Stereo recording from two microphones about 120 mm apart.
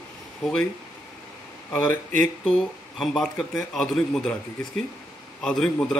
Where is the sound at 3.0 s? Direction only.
Centre (ahead or behind).